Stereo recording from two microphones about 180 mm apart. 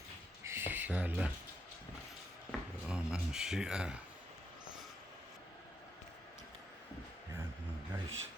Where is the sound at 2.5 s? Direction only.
Centre (ahead or behind).